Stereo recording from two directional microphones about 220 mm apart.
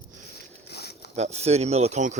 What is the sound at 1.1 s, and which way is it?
Speech, 30° right (ahead or behind).